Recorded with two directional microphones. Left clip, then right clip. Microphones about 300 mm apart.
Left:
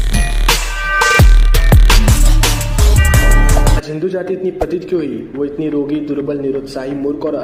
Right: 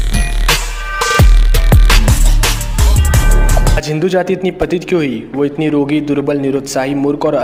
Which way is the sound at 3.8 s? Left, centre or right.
Right.